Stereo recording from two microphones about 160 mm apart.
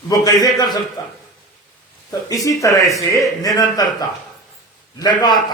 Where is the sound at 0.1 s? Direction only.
25° left (ahead or behind).